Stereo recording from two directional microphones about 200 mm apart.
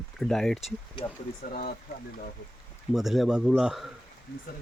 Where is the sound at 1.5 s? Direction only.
45° left (ahead or behind).